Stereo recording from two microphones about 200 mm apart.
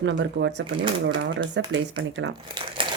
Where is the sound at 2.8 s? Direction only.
25° right (ahead or behind).